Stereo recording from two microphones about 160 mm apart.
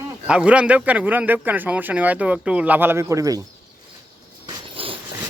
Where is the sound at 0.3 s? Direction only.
5° right (ahead or behind).